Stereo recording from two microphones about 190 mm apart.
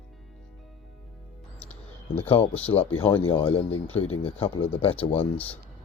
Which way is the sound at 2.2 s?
30° left (ahead or behind).